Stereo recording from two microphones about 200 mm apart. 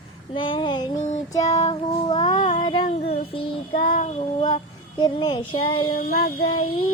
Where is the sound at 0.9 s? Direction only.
40° left (ahead or behind).